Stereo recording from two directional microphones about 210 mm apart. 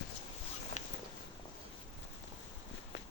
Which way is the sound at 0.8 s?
35° left (ahead or behind).